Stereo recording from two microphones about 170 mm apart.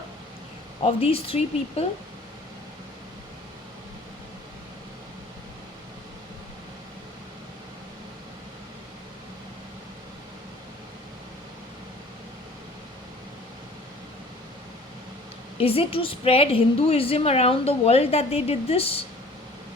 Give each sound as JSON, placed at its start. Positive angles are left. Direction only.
{"t": 0.8, "sound": "a woman's voice", "side_deg": 35}
{"t": 15.5, "sound": "a woman's voice", "side_deg": 35}